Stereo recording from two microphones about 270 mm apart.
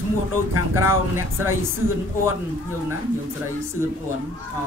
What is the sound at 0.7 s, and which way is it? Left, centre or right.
Speech, centre.